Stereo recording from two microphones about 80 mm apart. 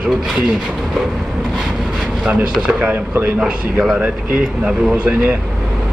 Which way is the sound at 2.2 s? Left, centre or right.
Centre.